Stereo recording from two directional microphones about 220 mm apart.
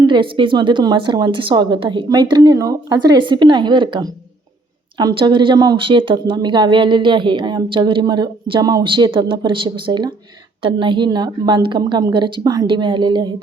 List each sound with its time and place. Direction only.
0.0 s speech: 20° right (ahead or behind)